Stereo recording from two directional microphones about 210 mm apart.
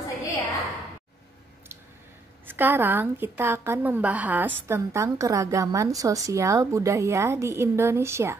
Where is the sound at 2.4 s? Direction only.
10° right (ahead or behind).